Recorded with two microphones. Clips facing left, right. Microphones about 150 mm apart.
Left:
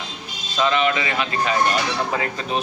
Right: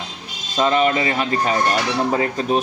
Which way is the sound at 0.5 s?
40° right (ahead or behind).